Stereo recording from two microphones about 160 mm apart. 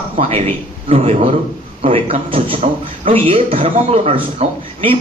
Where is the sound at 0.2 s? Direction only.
40° right (ahead or behind).